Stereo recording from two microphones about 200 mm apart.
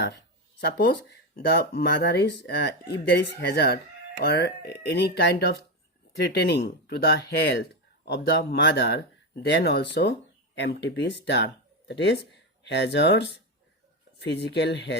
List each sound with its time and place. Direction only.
0.6 s speech: 55° left (ahead or behind)